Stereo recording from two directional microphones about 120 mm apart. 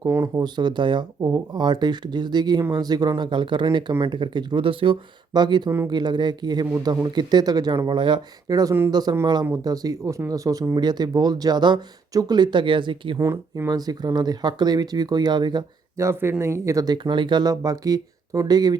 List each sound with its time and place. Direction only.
0.0 s speech: 25° right (ahead or behind)
0.4 s speech: 40° right (ahead or behind)
13.1 s speech: 25° right (ahead or behind)
16.0 s speech: 20° right (ahead or behind)